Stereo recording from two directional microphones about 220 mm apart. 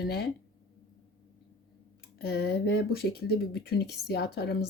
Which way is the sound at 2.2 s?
50° left (ahead or behind).